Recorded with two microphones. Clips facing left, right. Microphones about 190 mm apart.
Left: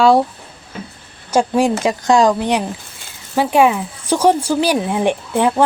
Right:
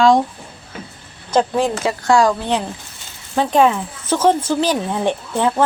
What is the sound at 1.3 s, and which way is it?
Speech, 10° left (ahead or behind).